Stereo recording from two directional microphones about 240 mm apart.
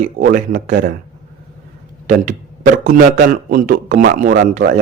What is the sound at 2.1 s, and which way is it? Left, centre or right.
A man's voice, right.